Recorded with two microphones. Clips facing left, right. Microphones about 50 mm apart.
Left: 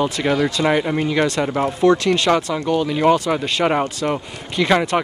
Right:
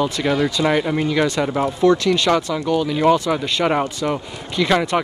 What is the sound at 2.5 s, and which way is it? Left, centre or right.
Speech, centre.